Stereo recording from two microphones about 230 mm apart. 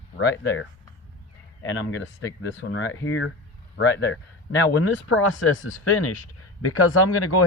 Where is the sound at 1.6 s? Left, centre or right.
Left.